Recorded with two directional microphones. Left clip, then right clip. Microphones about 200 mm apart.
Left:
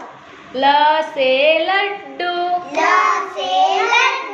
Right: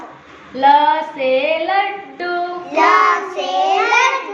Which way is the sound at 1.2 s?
35° left (ahead or behind).